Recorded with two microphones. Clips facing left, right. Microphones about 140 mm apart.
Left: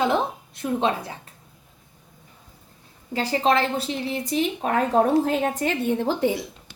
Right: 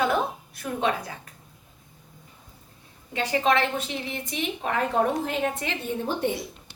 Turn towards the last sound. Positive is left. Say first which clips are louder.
# left 5 dB
turn(degrees=90)